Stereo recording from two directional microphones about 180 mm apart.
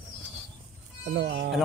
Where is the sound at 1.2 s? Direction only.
65° right (ahead or behind).